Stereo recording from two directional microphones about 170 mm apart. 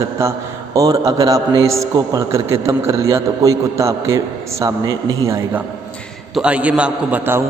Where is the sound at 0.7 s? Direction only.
20° right (ahead or behind).